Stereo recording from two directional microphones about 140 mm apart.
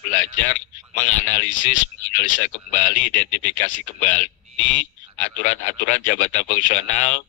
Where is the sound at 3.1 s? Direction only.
65° left (ahead or behind).